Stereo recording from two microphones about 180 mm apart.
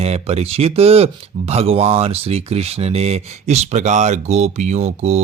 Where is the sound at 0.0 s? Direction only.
35° right (ahead or behind).